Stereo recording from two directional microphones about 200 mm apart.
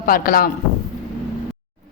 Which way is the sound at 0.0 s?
45° left (ahead or behind).